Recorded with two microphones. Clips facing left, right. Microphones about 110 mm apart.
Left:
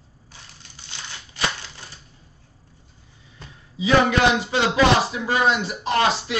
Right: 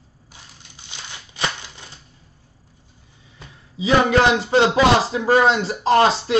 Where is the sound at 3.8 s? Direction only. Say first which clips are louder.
Right 2 dB; 40° right (ahead or behind).